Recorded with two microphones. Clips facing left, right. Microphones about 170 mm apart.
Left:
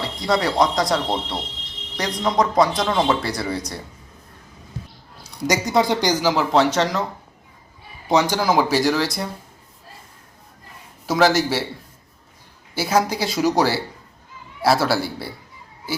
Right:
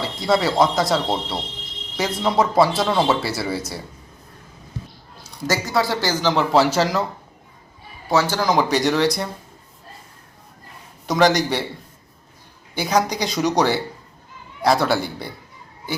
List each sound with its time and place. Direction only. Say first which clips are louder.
0.0 s speech: right 2 dB; centre (ahead or behind)
5.5 s a man's voice: left 2 dB; 20° left (ahead or behind)
6.5 s speech: right 2 dB; 5° right (ahead or behind)
8.1 s speech: left 1 dB; 15° left (ahead or behind); by 9.3 s centre (ahead or behind)
11.0 s a man's voice: even; 5° left (ahead or behind)
12.7 s speech: even; 5° left (ahead or behind)